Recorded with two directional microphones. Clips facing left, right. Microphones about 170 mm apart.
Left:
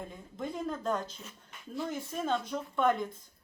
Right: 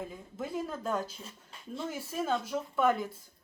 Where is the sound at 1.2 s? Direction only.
30° right (ahead or behind).